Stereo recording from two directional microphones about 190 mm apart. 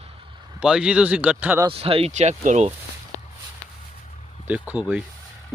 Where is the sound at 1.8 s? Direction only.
30° right (ahead or behind).